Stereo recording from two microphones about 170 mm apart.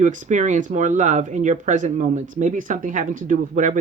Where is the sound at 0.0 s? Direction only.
45° right (ahead or behind).